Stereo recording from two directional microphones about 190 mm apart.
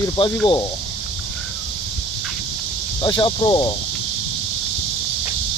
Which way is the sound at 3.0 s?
25° left (ahead or behind).